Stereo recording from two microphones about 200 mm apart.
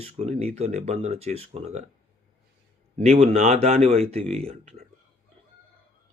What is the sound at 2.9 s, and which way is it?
Speech, 30° right (ahead or behind).